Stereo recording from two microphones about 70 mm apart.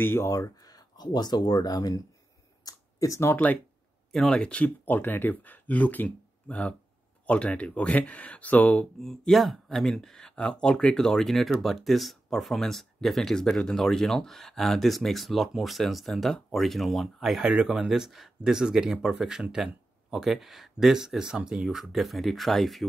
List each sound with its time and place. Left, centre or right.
0.0 s speech: left
0.3 s speech: left
2.6 s a sound: left
4.1 s speech: centre
4.4 s speech: centre
4.6 s speech: left
9.0 s speech: centre
17.5 s speech: centre